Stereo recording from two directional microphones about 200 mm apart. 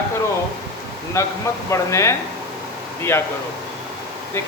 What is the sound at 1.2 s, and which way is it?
Speech, 15° left (ahead or behind).